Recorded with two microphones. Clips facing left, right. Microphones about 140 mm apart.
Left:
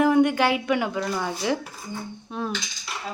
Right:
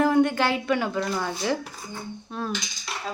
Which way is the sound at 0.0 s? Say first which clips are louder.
Left 2 dB; 15° left (ahead or behind).